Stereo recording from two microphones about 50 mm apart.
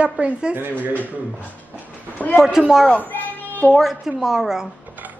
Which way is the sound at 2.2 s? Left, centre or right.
Left.